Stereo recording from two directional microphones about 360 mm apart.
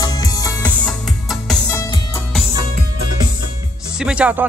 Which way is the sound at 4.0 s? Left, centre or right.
Centre.